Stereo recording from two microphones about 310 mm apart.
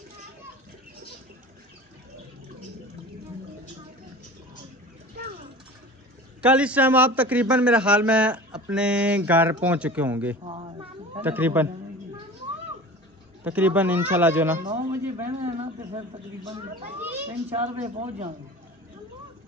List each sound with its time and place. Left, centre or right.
5.1 s mechanisms: right
6.4 s speech: centre
10.4 s a sound: centre
11.1 s speech: centre
13.4 s a man's voice: centre
15.5 s a sound: centre
17.5 s speech: right